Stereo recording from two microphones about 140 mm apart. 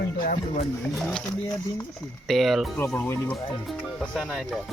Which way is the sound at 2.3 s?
Centre (ahead or behind).